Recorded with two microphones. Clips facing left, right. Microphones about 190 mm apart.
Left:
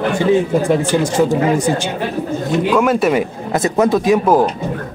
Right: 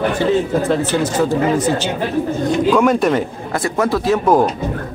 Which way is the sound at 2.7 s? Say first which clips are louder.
Left 1 dB; 5° left (ahead or behind).